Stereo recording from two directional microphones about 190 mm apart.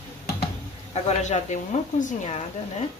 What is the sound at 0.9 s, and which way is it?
Speech, 35° left (ahead or behind).